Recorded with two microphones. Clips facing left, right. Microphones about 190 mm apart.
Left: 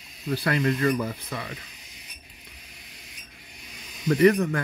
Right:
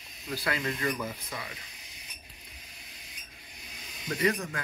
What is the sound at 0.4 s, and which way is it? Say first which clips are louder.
Speech: left 8 dB; 55° left (ahead or behind).